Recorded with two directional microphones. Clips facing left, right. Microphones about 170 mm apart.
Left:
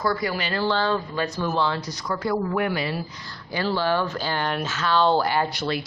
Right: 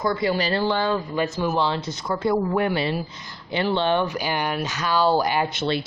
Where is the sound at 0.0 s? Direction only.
25° right (ahead or behind).